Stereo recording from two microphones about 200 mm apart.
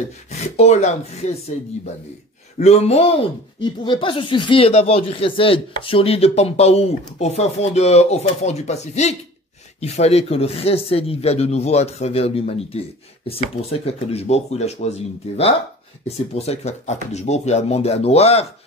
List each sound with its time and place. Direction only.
0.3 s speech: 35° left (ahead or behind)
2.6 s speech: 30° left (ahead or behind)